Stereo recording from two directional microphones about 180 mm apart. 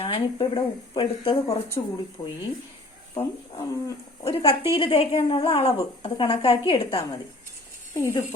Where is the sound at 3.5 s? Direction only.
25° left (ahead or behind).